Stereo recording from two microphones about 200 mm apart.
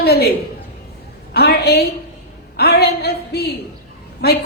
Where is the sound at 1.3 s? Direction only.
55° left (ahead or behind).